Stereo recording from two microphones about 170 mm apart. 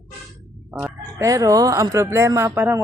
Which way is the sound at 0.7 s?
15° right (ahead or behind).